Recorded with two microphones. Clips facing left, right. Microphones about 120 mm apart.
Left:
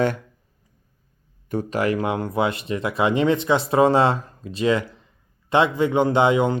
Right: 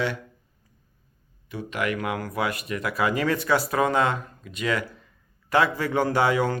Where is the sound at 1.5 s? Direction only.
45° left (ahead or behind).